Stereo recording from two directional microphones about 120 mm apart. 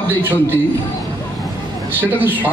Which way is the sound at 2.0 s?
15° right (ahead or behind).